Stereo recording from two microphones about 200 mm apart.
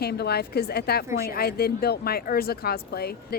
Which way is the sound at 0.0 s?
55° left (ahead or behind).